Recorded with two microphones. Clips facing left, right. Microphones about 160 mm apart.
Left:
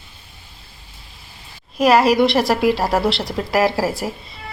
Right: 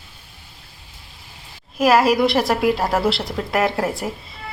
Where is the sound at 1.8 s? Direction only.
Centre (ahead or behind).